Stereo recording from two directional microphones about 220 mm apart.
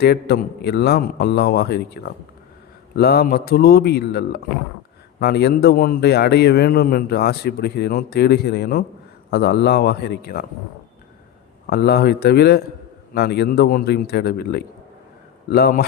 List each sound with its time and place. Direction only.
0.0 s a man's voice: 45° left (ahead or behind)
11.6 s a man's voice: 45° left (ahead or behind)